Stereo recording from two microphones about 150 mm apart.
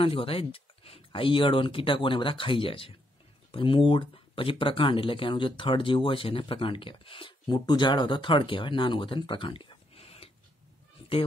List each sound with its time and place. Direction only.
0.0 s speech: 40° left (ahead or behind)